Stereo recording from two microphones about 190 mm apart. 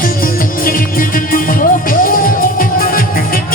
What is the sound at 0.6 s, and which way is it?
Music, 45° left (ahead or behind).